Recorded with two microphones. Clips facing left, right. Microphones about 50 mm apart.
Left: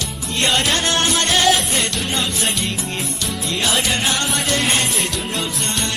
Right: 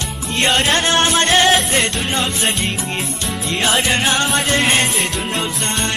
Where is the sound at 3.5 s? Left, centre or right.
Right.